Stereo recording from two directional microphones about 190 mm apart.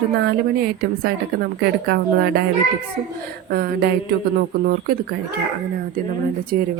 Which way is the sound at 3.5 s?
55° right (ahead or behind).